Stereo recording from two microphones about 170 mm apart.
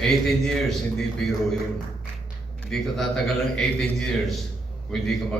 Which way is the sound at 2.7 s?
5° left (ahead or behind).